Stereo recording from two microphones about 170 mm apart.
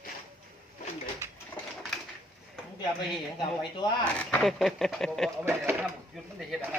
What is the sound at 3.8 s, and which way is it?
Speech, 25° left (ahead or behind).